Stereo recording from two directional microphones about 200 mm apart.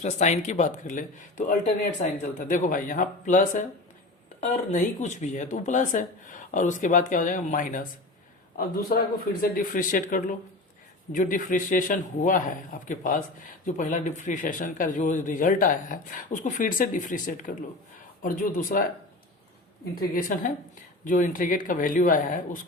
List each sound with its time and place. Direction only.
0.0 s a man's voice: 35° left (ahead or behind)
20.0 s a man's voice: 45° left (ahead or behind)